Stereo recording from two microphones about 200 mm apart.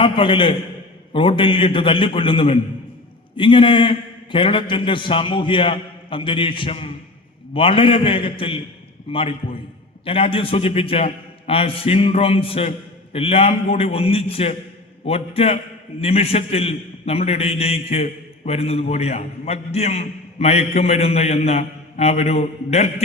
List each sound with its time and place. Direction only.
0.0 s a man's voice: 25° left (ahead or behind)